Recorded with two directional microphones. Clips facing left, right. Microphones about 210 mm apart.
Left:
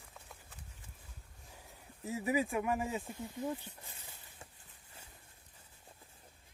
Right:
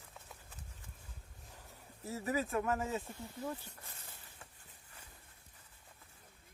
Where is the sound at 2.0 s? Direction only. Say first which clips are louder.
Left 3 dB; 15° left (ahead or behind).